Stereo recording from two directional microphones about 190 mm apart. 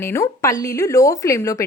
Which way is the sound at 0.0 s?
15° left (ahead or behind).